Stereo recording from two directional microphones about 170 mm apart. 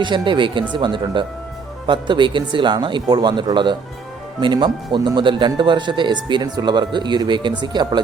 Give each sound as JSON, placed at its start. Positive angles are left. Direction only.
{"t": 0.0, "sound": "speech", "side_deg": -30}